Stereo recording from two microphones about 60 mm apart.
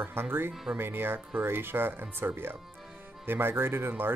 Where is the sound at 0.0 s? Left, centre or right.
Right.